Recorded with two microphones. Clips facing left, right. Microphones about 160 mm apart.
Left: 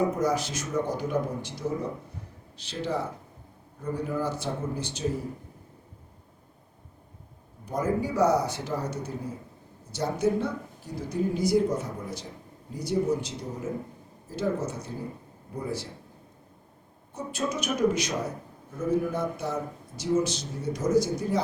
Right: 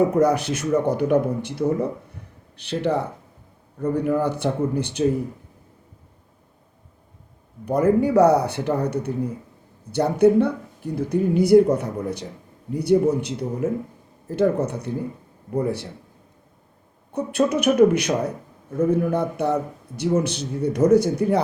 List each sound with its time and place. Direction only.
0.2 s speech: 60° right (ahead or behind)
7.6 s speech: 65° right (ahead or behind)
17.2 s speech: 60° right (ahead or behind)